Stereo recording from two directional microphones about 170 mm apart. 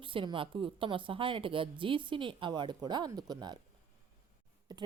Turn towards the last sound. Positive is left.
turn(degrees=-25)  # may be behind; listen again after turning